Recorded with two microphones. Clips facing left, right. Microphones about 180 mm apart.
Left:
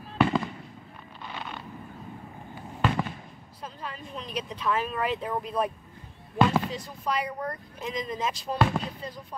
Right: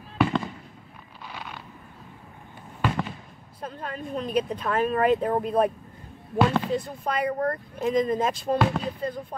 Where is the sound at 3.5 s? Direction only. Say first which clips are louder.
Right 5 dB; 50° right (ahead or behind).